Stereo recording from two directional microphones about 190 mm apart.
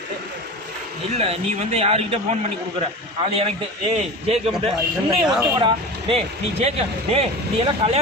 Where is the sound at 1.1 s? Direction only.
35° right (ahead or behind).